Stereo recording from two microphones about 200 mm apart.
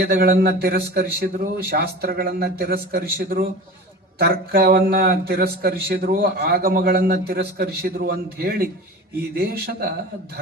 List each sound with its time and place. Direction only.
0.0 s speech: 50° right (ahead or behind)